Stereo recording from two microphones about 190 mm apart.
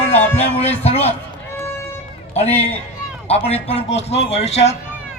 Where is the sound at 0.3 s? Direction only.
35° left (ahead or behind).